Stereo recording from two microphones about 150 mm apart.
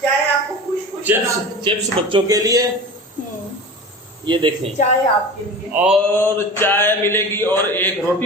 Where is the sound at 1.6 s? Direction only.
35° right (ahead or behind).